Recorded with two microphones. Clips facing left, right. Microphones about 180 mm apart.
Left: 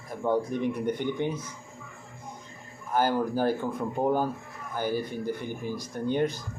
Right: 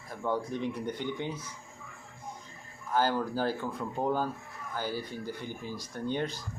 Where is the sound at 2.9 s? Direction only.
15° left (ahead or behind).